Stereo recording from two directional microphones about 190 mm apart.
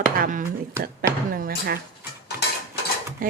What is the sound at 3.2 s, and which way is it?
Speech, 45° right (ahead or behind).